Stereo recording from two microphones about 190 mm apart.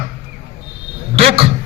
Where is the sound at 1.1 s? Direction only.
30° right (ahead or behind).